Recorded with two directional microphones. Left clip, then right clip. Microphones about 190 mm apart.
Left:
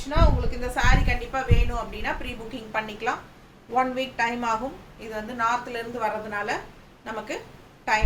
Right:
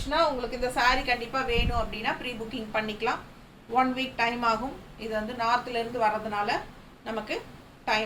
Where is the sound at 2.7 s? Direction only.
15° left (ahead or behind).